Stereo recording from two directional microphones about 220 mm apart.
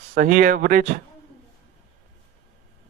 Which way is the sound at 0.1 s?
35° right (ahead or behind).